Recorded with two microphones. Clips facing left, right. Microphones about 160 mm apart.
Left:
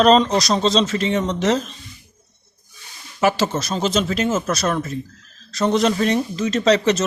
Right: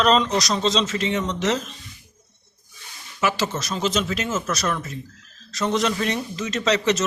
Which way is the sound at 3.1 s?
35° left (ahead or behind).